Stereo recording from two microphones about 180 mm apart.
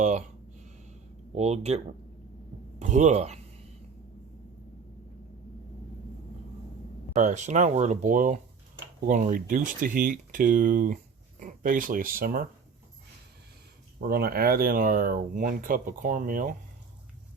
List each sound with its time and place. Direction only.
1.4 s speech: 35° right (ahead or behind)
7.1 s speech: 40° right (ahead or behind)
14.1 s speech: 60° right (ahead or behind)